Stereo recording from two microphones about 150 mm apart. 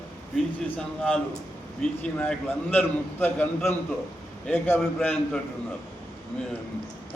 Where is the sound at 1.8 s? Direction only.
5° left (ahead or behind).